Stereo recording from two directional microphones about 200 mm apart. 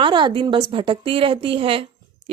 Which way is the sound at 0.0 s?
25° right (ahead or behind).